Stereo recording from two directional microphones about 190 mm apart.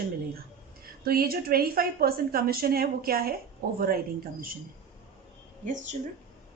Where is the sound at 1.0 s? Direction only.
50° right (ahead or behind).